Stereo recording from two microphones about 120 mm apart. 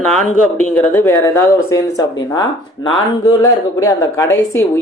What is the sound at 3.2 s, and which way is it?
Speech, 30° left (ahead or behind).